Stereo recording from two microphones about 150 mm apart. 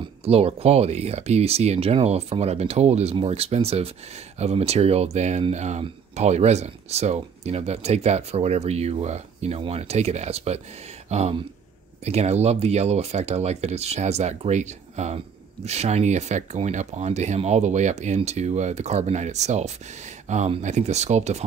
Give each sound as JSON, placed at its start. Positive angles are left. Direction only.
{"t": 0.2, "sound": "speech", "side_deg": -40}
{"t": 11.1, "sound": "a sound", "side_deg": -45}
{"t": 12.0, "sound": "speech", "side_deg": -45}